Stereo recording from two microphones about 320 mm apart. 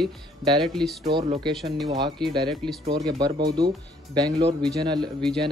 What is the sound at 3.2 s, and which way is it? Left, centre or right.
Speech, centre.